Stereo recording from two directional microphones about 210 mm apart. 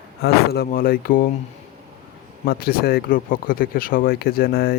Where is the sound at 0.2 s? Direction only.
50° left (ahead or behind).